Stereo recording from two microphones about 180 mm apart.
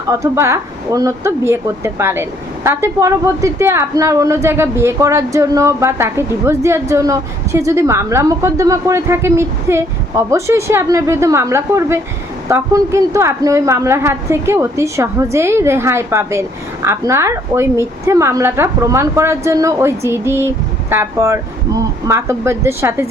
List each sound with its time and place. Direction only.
0.1 s a woman's voice: 15° right (ahead or behind)